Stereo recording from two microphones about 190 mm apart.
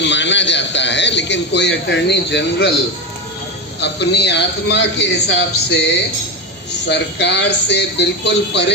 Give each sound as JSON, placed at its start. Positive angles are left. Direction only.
{"t": 0.0, "sound": "a man's voice", "side_deg": 70}
{"t": 3.8, "sound": "a man's voice", "side_deg": 65}